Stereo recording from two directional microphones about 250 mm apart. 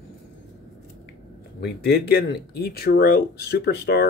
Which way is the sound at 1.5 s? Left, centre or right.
Left.